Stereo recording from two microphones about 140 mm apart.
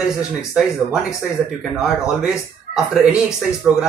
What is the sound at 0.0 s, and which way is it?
Speech, 5° right (ahead or behind).